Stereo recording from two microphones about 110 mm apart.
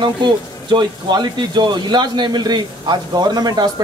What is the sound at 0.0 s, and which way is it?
Speech, 45° right (ahead or behind).